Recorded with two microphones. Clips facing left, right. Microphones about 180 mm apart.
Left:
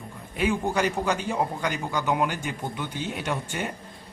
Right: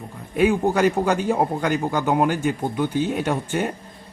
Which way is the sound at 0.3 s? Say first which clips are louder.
Right 6 dB; 50° right (ahead or behind).